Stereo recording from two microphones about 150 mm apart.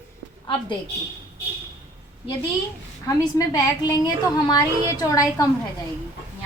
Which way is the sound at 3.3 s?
25° left (ahead or behind).